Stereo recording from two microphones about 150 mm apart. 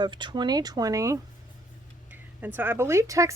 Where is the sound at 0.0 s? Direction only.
30° right (ahead or behind).